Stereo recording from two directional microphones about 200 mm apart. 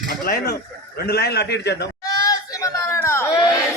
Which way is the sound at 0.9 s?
50° left (ahead or behind).